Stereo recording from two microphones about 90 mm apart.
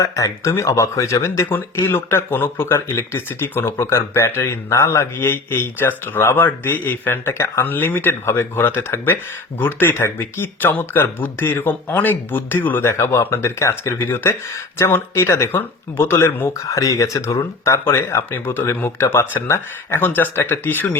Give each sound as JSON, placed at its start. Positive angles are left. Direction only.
{"t": 0.0, "sound": "speech", "side_deg": 35}
{"t": 17.9, "sound": "speech", "side_deg": 25}